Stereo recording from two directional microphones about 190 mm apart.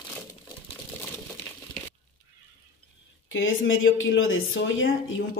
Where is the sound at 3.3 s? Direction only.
90° left.